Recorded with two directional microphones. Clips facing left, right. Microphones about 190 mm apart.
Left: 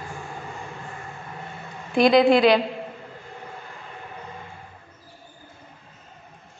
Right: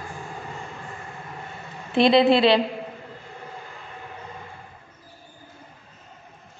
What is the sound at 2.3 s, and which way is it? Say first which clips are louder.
Speech: left 1 dB; 30° right (ahead or behind).